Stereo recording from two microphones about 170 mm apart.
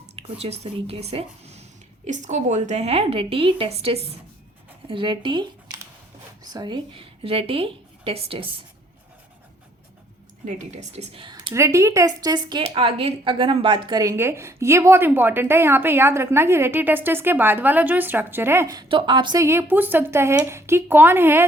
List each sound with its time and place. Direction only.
0.2 s a woman's voice: 35° right (ahead or behind)
10.4 s a woman's voice: 40° right (ahead or behind)
11.5 s a woman's voice: 15° right (ahead or behind)